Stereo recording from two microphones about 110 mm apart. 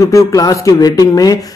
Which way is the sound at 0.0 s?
30° left (ahead or behind).